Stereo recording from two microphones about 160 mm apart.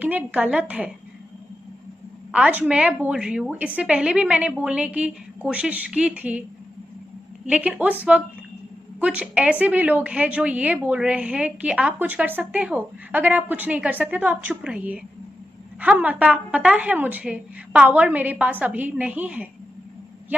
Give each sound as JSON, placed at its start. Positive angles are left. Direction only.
{"t": 0.0, "sound": "a woman's voice", "side_deg": -10}
{"t": 2.3, "sound": "a woman's voice", "side_deg": -5}
{"t": 7.4, "sound": "a woman's voice", "side_deg": -5}